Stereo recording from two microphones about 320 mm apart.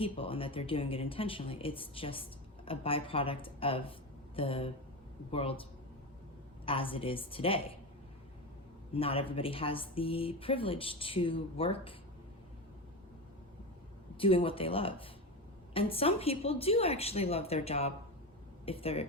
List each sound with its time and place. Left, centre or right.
0.0 s speech: centre
6.7 s speech: centre
8.9 s speech: centre
14.2 s speech: centre